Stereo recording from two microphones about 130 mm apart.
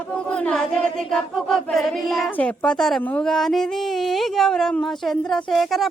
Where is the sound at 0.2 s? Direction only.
10° left (ahead or behind).